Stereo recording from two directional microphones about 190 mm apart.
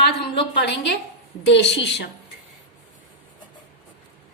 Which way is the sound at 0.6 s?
65° left (ahead or behind).